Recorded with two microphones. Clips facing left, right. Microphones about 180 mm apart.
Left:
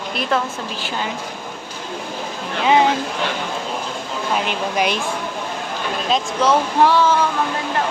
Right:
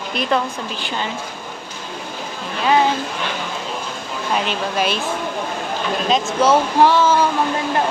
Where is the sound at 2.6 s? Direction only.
15° left (ahead or behind).